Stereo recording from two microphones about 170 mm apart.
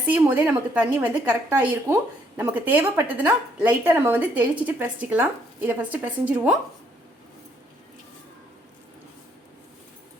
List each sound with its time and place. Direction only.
0.1 s a woman's voice: 10° right (ahead or behind)